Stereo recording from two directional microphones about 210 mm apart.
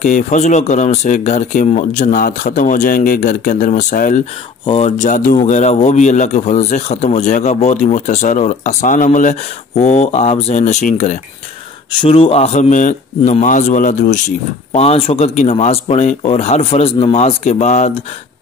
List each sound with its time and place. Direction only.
0.0 s speech: 35° left (ahead or behind)